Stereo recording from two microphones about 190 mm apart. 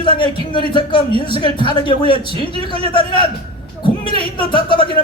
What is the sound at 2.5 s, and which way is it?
Speech, 30° right (ahead or behind).